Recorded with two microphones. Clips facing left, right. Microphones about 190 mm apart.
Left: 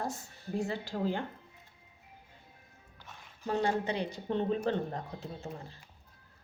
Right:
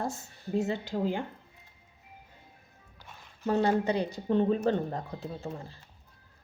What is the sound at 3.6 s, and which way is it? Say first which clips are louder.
A woman's voice: right 4 dB; 40° right (ahead or behind).